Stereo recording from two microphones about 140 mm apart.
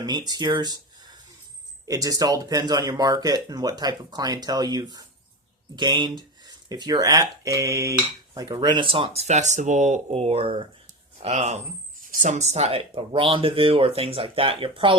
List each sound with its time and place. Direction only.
0.0 s speech: 30° right (ahead or behind)
9.2 s speech: 55° right (ahead or behind)
11.2 s speech: 50° right (ahead or behind)